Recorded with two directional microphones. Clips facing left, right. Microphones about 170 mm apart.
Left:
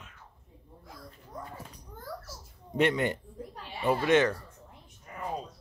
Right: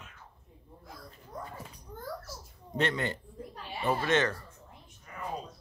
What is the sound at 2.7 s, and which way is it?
Speech, 15° left (ahead or behind).